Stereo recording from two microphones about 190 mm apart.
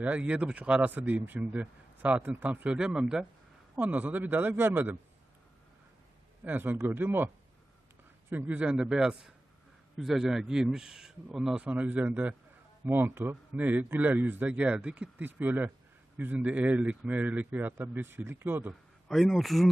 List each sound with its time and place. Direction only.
0.0 s speech: 5° right (ahead or behind)
6.4 s speech: 10° right (ahead or behind)
8.3 s speech: 10° right (ahead or behind)
18.7 s speech: centre (ahead or behind)